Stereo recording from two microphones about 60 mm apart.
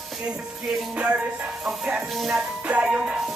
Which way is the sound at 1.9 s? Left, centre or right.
Centre.